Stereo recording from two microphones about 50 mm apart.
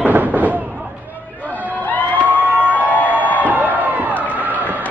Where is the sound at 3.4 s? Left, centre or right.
Right.